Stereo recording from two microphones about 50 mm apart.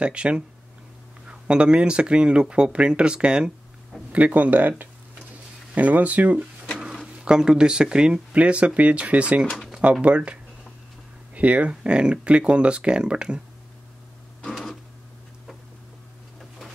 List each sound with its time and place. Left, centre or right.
0.0 s speech: right
7.2 s speech: centre
9.7 s a sound: right
10.0 s speech: right
14.4 s printer: centre